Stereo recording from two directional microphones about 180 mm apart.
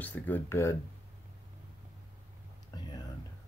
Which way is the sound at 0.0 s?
10° left (ahead or behind).